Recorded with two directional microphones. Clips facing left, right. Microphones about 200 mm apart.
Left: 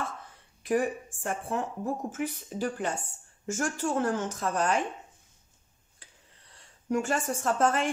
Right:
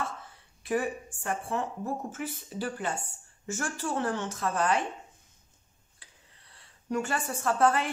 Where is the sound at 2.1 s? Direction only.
45° left (ahead or behind).